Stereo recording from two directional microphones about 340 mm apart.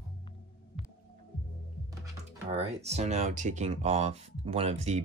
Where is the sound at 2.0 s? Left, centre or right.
Centre.